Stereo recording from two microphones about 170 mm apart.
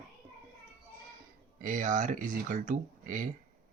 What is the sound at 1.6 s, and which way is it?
Speech, 45° right (ahead or behind).